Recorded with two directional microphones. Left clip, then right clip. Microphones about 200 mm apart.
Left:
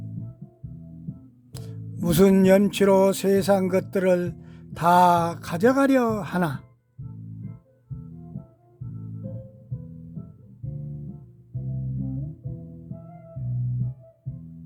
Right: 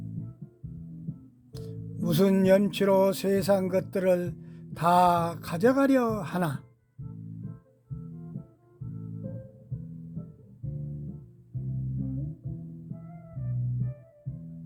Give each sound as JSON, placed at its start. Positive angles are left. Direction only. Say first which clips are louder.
{"t": 1.5, "sound": "speech", "louder": "left 1 dB", "side_deg": 15}